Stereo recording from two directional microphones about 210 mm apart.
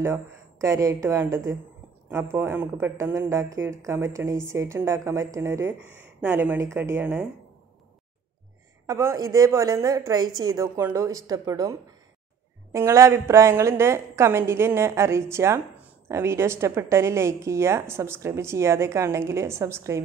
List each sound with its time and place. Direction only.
0.0 s a woman's voice: 10° right (ahead or behind)
8.8 s a woman's voice: 15° right (ahead or behind)